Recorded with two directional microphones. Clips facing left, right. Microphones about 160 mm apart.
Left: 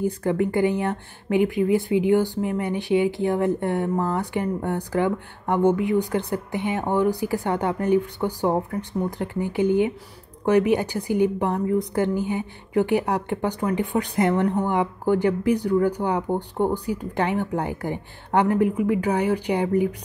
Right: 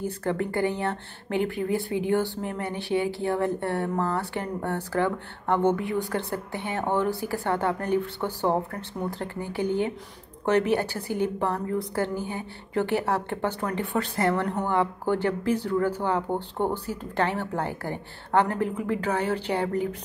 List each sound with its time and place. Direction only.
0.0 s a woman's voice: 15° left (ahead or behind)